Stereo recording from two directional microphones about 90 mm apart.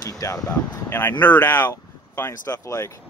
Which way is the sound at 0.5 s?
25° left (ahead or behind).